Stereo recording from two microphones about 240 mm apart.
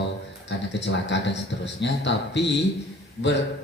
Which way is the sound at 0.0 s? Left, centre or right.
Left.